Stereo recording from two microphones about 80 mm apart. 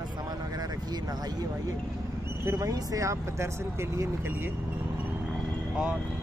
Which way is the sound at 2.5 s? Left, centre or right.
Right.